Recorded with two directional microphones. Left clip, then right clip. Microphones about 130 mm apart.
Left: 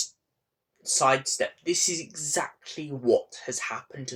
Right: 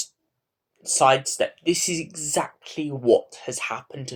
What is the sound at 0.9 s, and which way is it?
Speech, 50° right (ahead or behind).